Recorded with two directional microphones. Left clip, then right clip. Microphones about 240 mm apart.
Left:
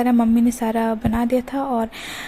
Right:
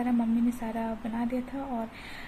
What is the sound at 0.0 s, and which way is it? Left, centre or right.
Speech, left.